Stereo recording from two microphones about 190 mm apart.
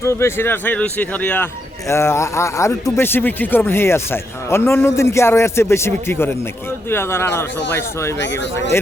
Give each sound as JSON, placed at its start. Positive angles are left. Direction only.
{"t": 0.0, "sound": "speech", "side_deg": 15}
{"t": 8.2, "sound": "speech", "side_deg": 70}